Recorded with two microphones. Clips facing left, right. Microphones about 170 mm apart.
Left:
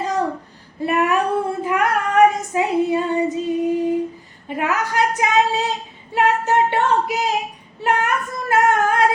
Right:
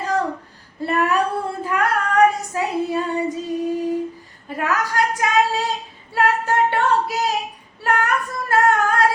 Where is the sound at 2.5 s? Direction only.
20° left (ahead or behind).